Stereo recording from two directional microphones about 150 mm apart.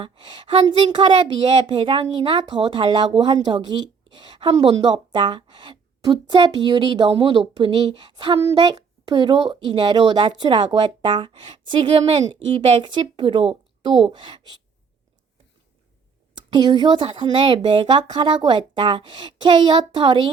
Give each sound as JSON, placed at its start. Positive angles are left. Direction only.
{"t": 0.0, "sound": "speech", "side_deg": -30}
{"t": 16.5, "sound": "speech", "side_deg": -30}